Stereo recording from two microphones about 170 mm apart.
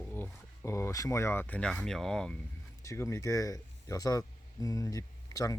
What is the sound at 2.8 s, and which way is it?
Speech, 15° left (ahead or behind).